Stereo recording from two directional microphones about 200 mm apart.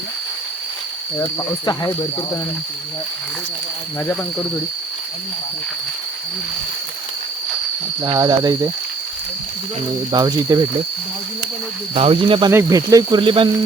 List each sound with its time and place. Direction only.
1.4 s speech: 20° left (ahead or behind)
8.0 s speech: 20° right (ahead or behind)
10.1 s speech: 20° right (ahead or behind)
11.9 s speech: 30° right (ahead or behind)
12.5 s speech: 15° right (ahead or behind)